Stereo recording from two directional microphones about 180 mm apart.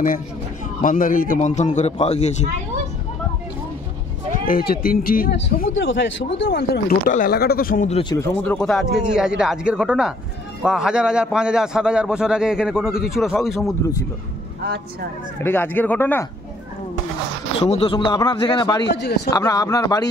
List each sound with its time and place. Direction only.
0.8 s a man's voice: 50° left (ahead or behind)
4.5 s speech: 55° left (ahead or behind)
5.7 s a man's voice: 90° left
6.3 s speech: 75° left (ahead or behind)
7.1 s speech: 50° left (ahead or behind)
7.9 s speech: 25° left (ahead or behind)
8.4 s a man's voice: 5° left (ahead or behind)
14.6 s speech: 60° right (ahead or behind)
15.4 s speech: 10° left (ahead or behind)
17.6 s speech: 30° left (ahead or behind)
18.9 s speech: 65° left (ahead or behind)
19.3 s speech: 20° left (ahead or behind)